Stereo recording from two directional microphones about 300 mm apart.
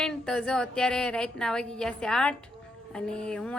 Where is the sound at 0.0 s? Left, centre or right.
Centre.